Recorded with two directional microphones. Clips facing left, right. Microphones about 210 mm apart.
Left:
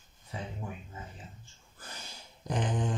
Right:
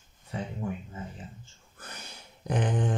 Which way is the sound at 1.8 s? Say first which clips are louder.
Right 2 dB; 60° right (ahead or behind).